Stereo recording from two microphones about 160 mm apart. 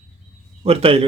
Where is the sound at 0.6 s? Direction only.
40° right (ahead or behind).